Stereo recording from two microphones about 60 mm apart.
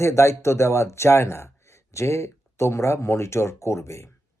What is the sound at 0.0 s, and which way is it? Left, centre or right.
Speech, left.